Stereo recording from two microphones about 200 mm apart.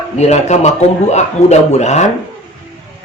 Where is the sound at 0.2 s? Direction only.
35° left (ahead or behind).